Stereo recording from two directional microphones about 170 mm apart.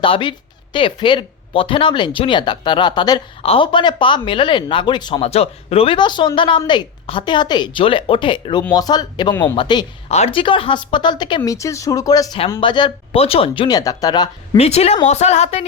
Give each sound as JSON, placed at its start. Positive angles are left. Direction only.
{"t": 0.0, "sound": "speech", "side_deg": 30}
{"t": 10.1, "sound": "speech", "side_deg": 35}
{"t": 14.5, "sound": "speech", "side_deg": 35}